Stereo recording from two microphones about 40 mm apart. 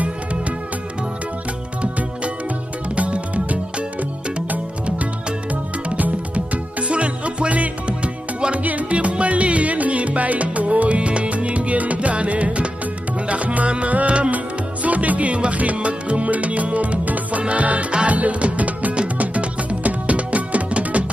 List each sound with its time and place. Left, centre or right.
1.8 s music: right
5.5 s music: right